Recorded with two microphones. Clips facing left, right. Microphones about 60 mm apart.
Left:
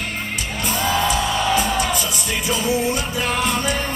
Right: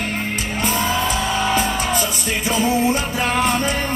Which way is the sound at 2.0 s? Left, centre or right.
Right.